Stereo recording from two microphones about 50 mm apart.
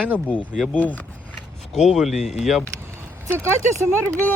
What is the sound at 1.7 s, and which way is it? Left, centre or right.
Speech, centre.